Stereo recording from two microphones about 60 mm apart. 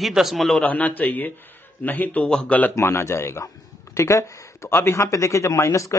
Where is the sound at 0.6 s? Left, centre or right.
Left.